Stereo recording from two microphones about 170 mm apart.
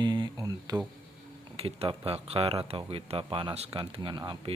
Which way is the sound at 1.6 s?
35° right (ahead or behind).